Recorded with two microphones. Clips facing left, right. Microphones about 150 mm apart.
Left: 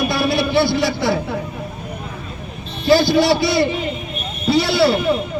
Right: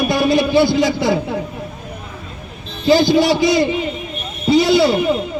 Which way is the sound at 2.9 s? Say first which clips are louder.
Right 1 dB; 15° right (ahead or behind).